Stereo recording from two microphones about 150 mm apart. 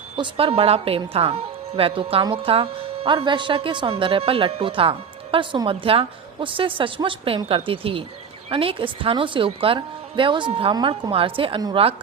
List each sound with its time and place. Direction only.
0.2 s speech: 40° right (ahead or behind)